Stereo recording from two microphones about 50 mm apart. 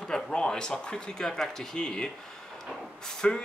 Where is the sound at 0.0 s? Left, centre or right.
Centre.